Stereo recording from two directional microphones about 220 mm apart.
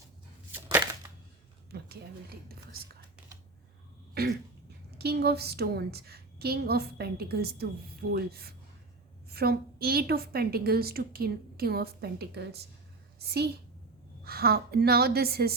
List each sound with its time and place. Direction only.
0.5 s chopping: 10° right (ahead or behind)
2.5 s whispering: 45° right (ahead or behind)
4.1 s a sound: 45° right (ahead or behind)
4.9 s a woman's voice: 45° right (ahead or behind)